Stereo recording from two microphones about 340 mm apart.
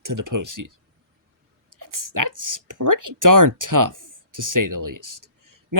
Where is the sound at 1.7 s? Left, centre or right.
Right.